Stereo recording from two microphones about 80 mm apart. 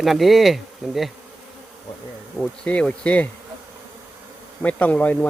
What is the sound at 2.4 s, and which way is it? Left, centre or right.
Bee, centre.